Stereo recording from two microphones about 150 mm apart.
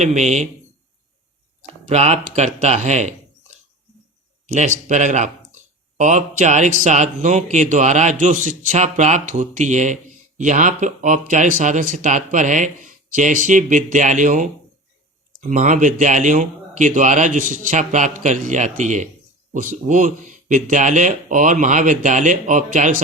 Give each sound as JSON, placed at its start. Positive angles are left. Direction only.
{"t": 0.0, "sound": "a man's voice", "side_deg": -50}
{"t": 1.8, "sound": "a man's voice", "side_deg": -45}